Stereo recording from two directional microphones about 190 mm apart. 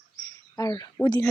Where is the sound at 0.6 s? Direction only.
20° left (ahead or behind).